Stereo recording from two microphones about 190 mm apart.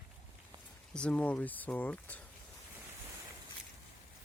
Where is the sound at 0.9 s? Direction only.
5° left (ahead or behind).